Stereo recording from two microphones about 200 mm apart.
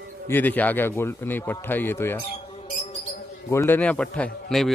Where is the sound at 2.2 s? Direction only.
30° left (ahead or behind).